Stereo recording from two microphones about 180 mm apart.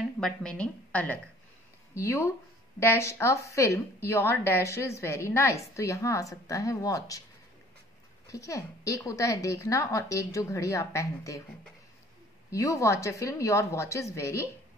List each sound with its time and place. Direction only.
0.2 s speech: 5° left (ahead or behind)
8.3 s speech: 15° left (ahead or behind)
12.4 s speech: 15° left (ahead or behind)